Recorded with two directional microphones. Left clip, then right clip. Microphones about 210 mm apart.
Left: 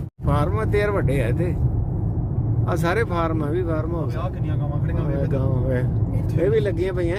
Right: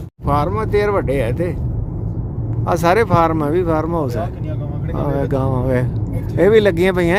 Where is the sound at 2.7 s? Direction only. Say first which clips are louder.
Right 9 dB; 30° right (ahead or behind).